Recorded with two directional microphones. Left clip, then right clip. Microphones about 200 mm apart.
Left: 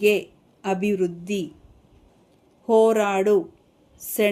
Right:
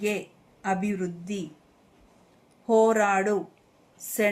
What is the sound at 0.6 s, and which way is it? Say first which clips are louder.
Speech: left 5 dB; 45° left (ahead or behind).